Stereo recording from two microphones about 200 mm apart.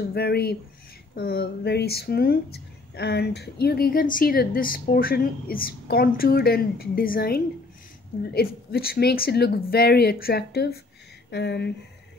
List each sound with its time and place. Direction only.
0.1 s speech: 50° left (ahead or behind)